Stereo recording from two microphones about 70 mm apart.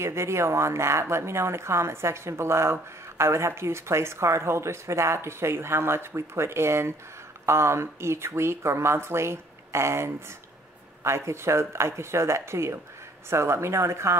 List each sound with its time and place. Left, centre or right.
0.0 s speech: right